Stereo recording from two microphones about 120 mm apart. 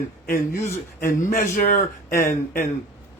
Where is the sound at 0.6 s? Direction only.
20° left (ahead or behind).